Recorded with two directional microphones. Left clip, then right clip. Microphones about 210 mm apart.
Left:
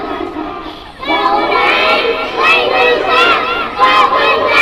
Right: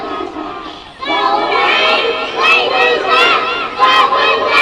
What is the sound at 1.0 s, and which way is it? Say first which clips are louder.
Child singing: left 1 dB; 25° right (ahead or behind).